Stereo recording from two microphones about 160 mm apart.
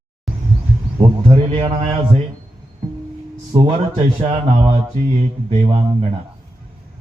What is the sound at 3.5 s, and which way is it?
Speech, 40° right (ahead or behind).